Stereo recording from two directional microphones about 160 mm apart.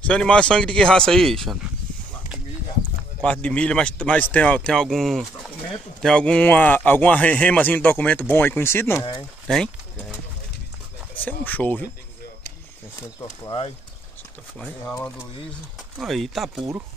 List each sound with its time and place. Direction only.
0.0 s speech: 5° left (ahead or behind)
3.2 s speech: 10° left (ahead or behind)
9.5 s pigeon: 5° left (ahead or behind)
11.2 s speech: 10° left (ahead or behind)
13.5 s speech: 35° left (ahead or behind)
16.0 s speech: centre (ahead or behind)